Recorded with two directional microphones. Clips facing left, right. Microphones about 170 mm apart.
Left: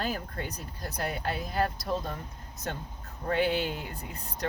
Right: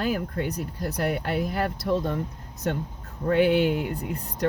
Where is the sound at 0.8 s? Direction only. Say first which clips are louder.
Right 5 dB; 70° right (ahead or behind).